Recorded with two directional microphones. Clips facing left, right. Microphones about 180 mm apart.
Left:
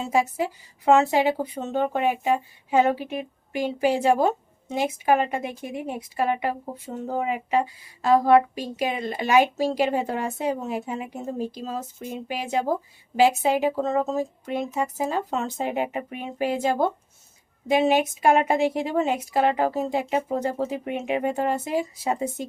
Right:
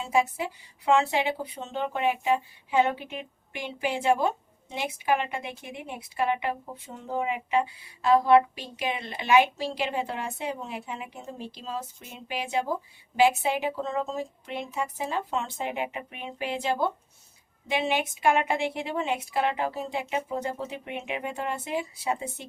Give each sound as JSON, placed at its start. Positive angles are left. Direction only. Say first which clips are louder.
{"t": 0.0, "sound": "a woman's voice", "louder": "left 3 dB", "side_deg": 40}